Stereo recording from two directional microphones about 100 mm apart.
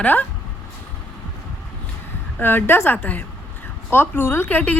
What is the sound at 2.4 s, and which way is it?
A woman's voice, 20° left (ahead or behind).